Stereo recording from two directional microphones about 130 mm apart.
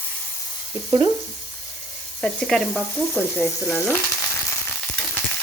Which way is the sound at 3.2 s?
15° left (ahead or behind).